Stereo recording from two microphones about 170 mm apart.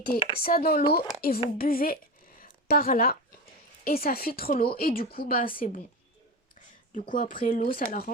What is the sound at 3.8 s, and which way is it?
A woman's voice, 60° left (ahead or behind).